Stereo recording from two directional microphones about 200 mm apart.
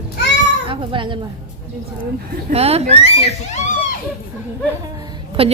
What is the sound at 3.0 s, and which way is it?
Speech, 35° left (ahead or behind).